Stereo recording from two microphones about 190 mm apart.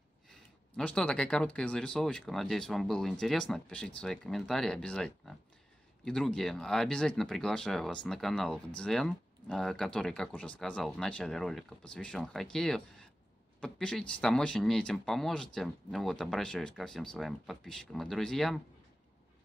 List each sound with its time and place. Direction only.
0.3 s speech: 5° left (ahead or behind)